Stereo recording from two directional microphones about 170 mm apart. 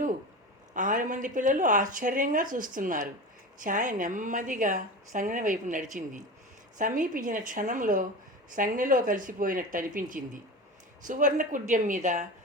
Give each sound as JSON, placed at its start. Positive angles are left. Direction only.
{"t": 0.7, "sound": "a woman's voice", "side_deg": -50}